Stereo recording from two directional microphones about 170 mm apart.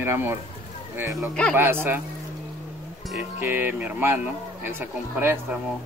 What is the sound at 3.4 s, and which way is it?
Speech, 10° right (ahead or behind).